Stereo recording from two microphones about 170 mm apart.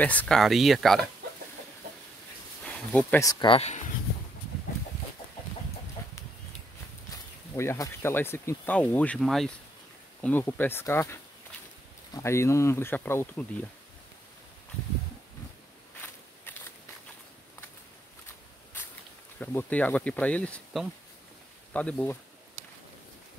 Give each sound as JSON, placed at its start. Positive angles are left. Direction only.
{"t": 0.0, "sound": "speech", "side_deg": 10}
{"t": 2.6, "sound": "a sound", "side_deg": 5}
{"t": 3.2, "sound": "speech", "side_deg": 25}
{"t": 7.5, "sound": "speech", "side_deg": 15}
{"t": 18.8, "sound": "a sound", "side_deg": 10}
{"t": 19.4, "sound": "speech", "side_deg": 10}